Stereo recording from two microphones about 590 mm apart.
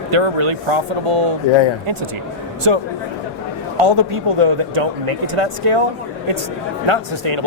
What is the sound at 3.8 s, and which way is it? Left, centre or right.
Speech, right.